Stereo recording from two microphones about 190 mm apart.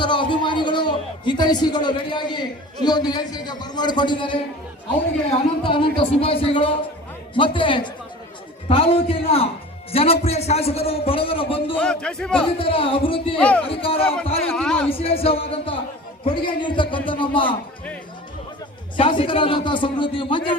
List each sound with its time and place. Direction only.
0.0 s a man's voice: 25° left (ahead or behind)
5.6 s a man's voice: 25° left (ahead or behind)
11.8 s a man's voice: 5° left (ahead or behind)
12.4 s a man's voice: 30° left (ahead or behind)
13.4 s speech: 5° left (ahead or behind)
13.7 s a man's voice: 30° left (ahead or behind)
14.5 s a man's voice: 5° left (ahead or behind)
14.8 s a man's voice: 30° left (ahead or behind)
18.9 s a man's voice: 25° left (ahead or behind)